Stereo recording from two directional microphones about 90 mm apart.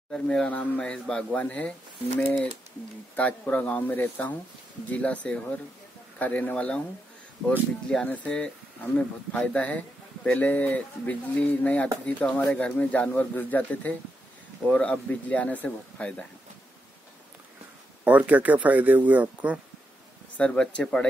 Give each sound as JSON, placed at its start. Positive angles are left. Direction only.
{"t": 0.1, "sound": "speech", "side_deg": 10}
{"t": 3.2, "sound": "speech", "side_deg": 15}
{"t": 18.0, "sound": "speech", "side_deg": -20}
{"t": 20.3, "sound": "speech", "side_deg": 10}